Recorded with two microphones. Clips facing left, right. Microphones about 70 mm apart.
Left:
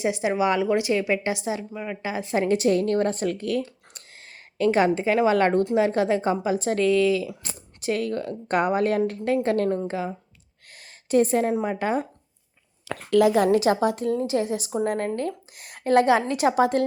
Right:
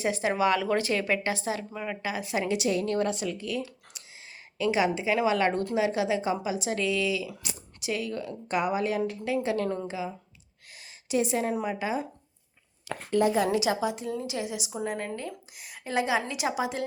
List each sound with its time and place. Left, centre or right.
0.0 s a woman's voice: centre
1.7 s a woman's voice: centre
2.0 s a woman's voice: left
10.8 s a sound: left
11.5 s a woman's voice: left
11.8 s speech: left
12.9 s a woman's voice: left
13.4 s a woman's voice: left